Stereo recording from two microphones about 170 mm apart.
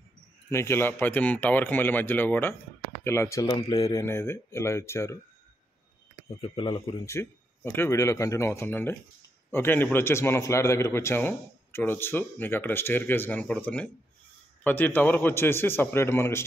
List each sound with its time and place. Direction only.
0.5 s a man's voice: 15° left (ahead or behind)
3.5 s speech: 35° left (ahead or behind)
3.9 s a man's voice: 15° left (ahead or behind)
6.4 s speech: 30° left (ahead or behind)
7.1 s a man's voice: 15° left (ahead or behind)